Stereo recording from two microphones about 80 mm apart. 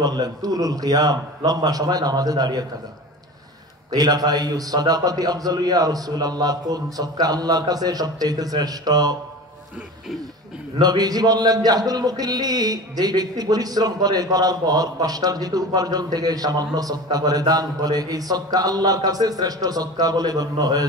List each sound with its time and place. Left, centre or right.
0.0 s a man's voice: right
3.9 s speech: right
10.8 s speech: right